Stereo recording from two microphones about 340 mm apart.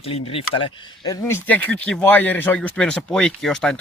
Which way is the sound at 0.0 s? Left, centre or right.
Centre.